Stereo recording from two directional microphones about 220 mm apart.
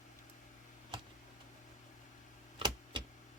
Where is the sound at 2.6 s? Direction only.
20° right (ahead or behind).